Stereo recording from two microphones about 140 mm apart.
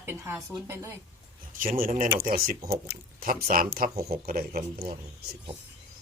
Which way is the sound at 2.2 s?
90° right.